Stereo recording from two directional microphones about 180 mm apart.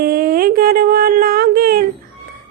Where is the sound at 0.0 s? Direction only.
55° right (ahead or behind).